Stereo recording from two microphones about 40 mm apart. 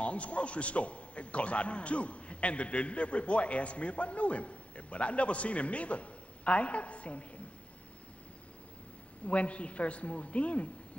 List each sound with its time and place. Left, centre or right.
0.0 s a man's voice: left
9.2 s a man's voice: left